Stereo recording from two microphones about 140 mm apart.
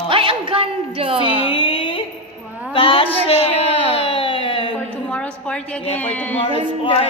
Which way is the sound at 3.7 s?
45° right (ahead or behind).